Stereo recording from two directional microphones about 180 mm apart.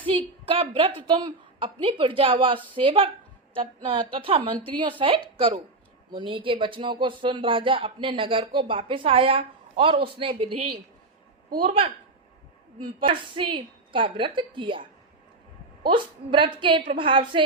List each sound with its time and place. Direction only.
0.4 s speech: 30° right (ahead or behind)
12.8 s speech: 30° right (ahead or behind)